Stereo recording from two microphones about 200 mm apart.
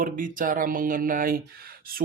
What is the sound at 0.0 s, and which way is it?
Speech, 45° right (ahead or behind).